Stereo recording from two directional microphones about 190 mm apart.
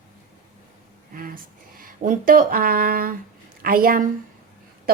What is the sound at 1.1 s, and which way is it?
A woman's voice, 50° right (ahead or behind).